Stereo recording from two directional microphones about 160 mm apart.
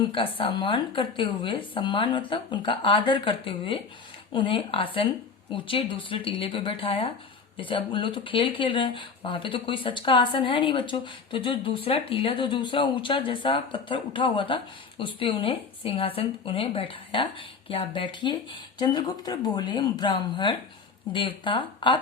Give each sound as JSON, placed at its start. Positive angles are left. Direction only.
{"t": 0.1, "sound": "speech", "side_deg": 35}